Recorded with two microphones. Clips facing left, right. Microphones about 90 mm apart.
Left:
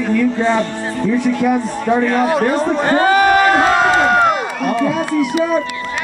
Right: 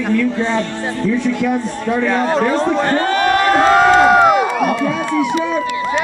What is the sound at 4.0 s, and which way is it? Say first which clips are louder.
Crowd: right 3 dB; 5° right (ahead or behind).